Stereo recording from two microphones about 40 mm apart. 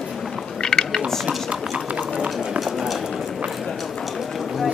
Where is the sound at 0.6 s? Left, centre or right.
Centre.